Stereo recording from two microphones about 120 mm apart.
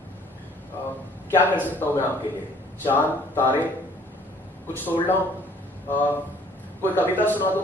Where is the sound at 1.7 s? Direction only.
15° left (ahead or behind).